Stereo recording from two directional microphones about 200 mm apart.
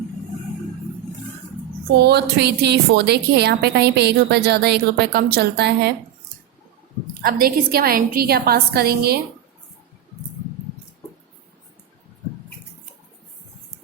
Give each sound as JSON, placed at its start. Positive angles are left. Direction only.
{"t": 2.0, "sound": "a woman's voice", "side_deg": -55}
{"t": 7.1, "sound": "a woman's voice", "side_deg": -50}